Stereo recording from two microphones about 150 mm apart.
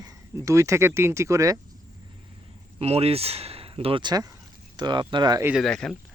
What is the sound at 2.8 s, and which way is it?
Speech, 40° right (ahead or behind).